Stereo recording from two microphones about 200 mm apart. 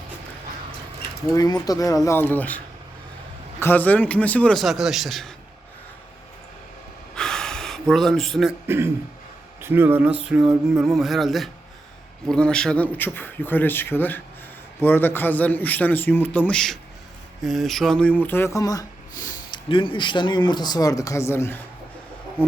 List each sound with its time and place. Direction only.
1.6 s speech: 15° left (ahead or behind)
3.6 s a man's voice: 10° left (ahead or behind)
7.2 s gasp: 5° left (ahead or behind)
8.6 s a man's voice: 10° right (ahead or behind); by 22.5 s 10° left (ahead or behind)